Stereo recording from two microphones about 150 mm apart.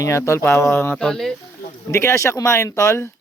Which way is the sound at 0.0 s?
20° left (ahead or behind).